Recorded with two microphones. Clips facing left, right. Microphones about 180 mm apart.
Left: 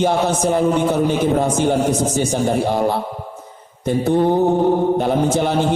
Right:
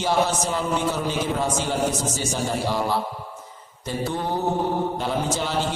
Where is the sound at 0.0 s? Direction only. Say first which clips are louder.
Left 5 dB; 55° left (ahead or behind).